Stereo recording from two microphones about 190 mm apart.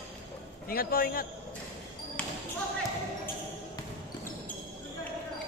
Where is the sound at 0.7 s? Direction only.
50° left (ahead or behind).